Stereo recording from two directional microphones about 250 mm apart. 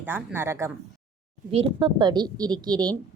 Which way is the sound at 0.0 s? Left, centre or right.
Centre.